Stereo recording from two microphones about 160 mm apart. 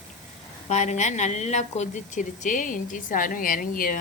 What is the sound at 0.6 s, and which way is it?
A woman's voice, 45° left (ahead or behind).